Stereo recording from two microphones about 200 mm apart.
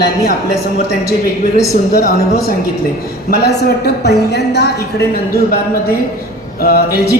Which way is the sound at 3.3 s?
55° left (ahead or behind).